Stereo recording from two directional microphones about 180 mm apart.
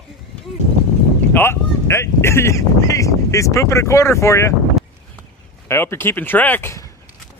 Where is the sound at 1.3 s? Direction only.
15° left (ahead or behind).